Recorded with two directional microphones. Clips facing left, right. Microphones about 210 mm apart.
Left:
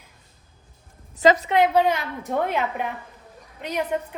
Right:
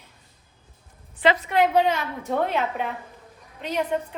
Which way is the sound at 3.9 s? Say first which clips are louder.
Left 1 dB; 10° left (ahead or behind).